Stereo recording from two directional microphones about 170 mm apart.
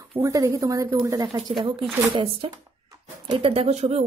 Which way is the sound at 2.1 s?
30° right (ahead or behind).